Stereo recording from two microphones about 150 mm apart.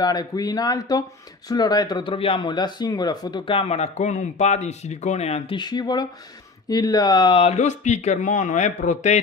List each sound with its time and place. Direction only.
0.0 s speech: 25° left (ahead or behind); by 5.6 s 45° left (ahead or behind)
5.6 s speech: 30° left (ahead or behind); by 9.2 s 50° left (ahead or behind)